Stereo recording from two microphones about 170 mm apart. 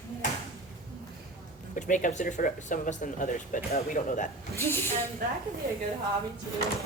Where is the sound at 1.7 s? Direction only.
50° left (ahead or behind).